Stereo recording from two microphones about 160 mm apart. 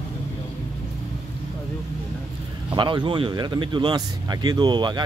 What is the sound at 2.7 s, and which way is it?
Speech, 30° right (ahead or behind).